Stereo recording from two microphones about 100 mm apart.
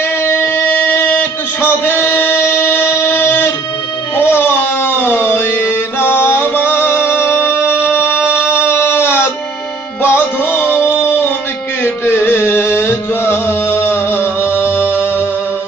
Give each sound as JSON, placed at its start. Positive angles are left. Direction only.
{"t": 0.2, "sound": "music", "side_deg": 20}
{"t": 8.4, "sound": "a sound", "side_deg": 25}
{"t": 10.0, "sound": "music", "side_deg": 20}
{"t": 12.0, "sound": "music", "side_deg": 20}